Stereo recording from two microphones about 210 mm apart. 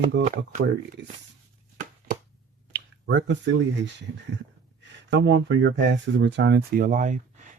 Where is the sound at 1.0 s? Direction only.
55° right (ahead or behind).